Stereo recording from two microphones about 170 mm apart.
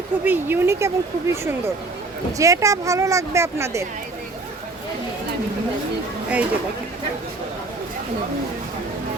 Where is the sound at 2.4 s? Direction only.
20° right (ahead or behind).